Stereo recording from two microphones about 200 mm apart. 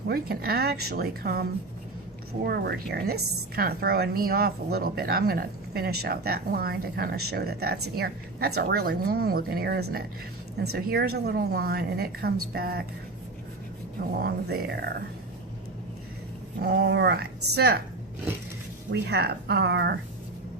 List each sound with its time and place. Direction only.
0.1 s a woman's voice: 50° right (ahead or behind)
14.2 s a woman's voice: 50° right (ahead or behind)
16.6 s a woman's voice: 55° right (ahead or behind)
18.9 s speech: 55° right (ahead or behind)